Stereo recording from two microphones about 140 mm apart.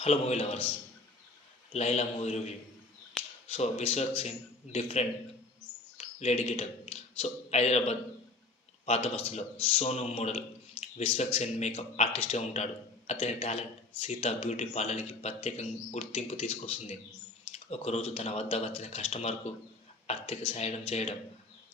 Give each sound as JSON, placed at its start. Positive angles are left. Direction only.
{"t": 0.0, "sound": "speech", "side_deg": 45}
{"t": 1.7, "sound": "speech", "side_deg": 50}
{"t": 6.1, "sound": "speech", "side_deg": 50}